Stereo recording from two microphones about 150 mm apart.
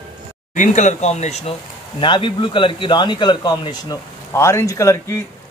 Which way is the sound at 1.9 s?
35° left (ahead or behind).